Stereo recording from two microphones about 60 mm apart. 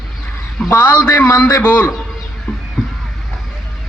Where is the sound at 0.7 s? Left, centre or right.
Left.